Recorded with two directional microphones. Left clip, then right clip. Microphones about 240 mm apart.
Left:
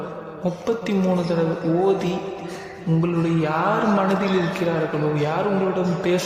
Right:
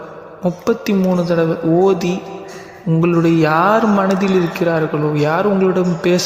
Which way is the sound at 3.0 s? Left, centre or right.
Right.